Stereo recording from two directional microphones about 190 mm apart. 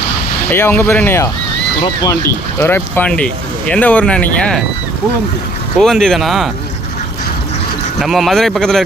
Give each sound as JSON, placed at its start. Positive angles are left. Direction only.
{"t": 0.5, "sound": "speech", "side_deg": 10}
{"t": 5.7, "sound": "speech", "side_deg": 0}
{"t": 7.9, "sound": "speech", "side_deg": 0}